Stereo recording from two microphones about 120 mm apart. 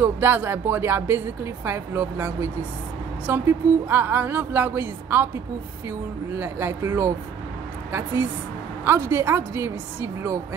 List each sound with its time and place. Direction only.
0.0 s a woman's voice: 20° right (ahead or behind)